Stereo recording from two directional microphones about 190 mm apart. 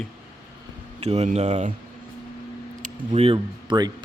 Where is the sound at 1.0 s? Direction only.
35° right (ahead or behind).